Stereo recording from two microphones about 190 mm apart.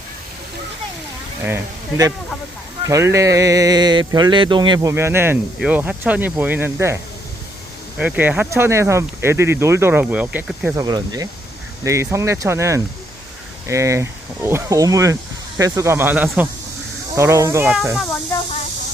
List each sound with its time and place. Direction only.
1.5 s speech: 15° right (ahead or behind)
10.8 s speech: 20° right (ahead or behind)
17.9 s speech: centre (ahead or behind)